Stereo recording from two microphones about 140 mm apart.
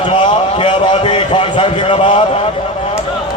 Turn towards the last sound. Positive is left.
turn(degrees=45)  # may be behind; listen again after turning